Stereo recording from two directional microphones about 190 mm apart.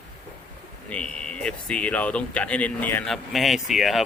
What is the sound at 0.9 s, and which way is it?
Speech, 5° left (ahead or behind).